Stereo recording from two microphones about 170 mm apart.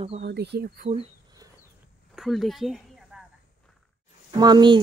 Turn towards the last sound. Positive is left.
turn(degrees=-25)  # may be behind; listen again after turning